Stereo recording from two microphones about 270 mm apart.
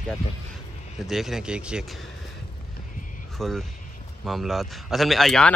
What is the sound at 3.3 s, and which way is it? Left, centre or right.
Speech, centre.